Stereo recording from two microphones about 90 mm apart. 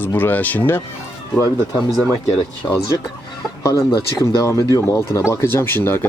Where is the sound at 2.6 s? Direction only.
25° left (ahead or behind).